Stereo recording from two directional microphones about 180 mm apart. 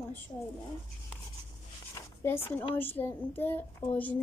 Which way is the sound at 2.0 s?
10° left (ahead or behind).